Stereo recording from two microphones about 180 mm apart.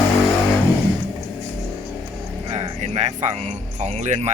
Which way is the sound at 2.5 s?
35° right (ahead or behind).